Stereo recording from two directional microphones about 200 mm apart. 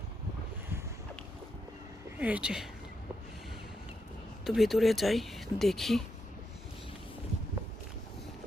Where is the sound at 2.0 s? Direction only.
5° right (ahead or behind).